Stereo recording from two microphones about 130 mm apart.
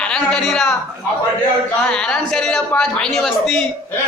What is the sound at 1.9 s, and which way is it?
A man's voice, 5° left (ahead or behind).